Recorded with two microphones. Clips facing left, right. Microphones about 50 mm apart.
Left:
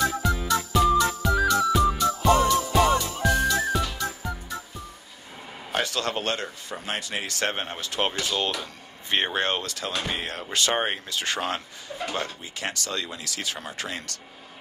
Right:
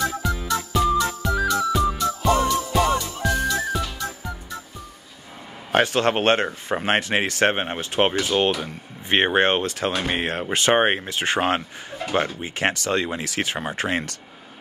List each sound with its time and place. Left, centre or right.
0.1 s music: centre
5.7 s speech: right